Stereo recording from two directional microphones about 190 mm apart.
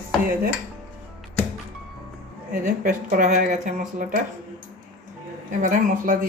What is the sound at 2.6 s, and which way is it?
Speech, 40° right (ahead or behind).